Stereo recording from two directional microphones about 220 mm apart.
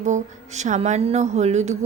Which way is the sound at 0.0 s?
35° right (ahead or behind).